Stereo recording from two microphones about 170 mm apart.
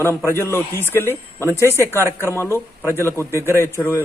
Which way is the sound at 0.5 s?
15° left (ahead or behind).